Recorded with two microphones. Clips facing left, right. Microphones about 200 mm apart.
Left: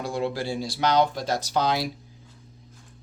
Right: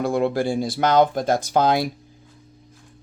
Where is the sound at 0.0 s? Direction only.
55° right (ahead or behind).